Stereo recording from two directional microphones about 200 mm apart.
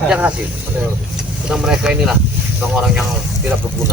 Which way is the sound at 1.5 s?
5° right (ahead or behind).